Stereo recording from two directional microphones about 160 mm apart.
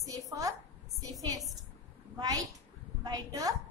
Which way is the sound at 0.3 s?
20° right (ahead or behind).